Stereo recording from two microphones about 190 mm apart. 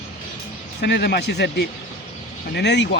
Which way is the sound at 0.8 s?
60° left (ahead or behind).